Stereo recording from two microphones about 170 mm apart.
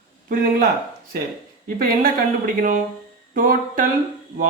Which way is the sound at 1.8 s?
55° right (ahead or behind).